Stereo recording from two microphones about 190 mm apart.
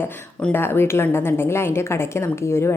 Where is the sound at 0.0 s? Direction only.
10° left (ahead or behind).